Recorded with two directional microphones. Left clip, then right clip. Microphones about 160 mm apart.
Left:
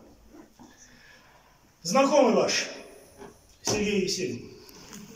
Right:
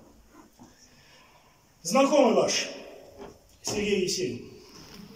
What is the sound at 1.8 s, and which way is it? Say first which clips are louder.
A man's voice: even; centre (ahead or behind).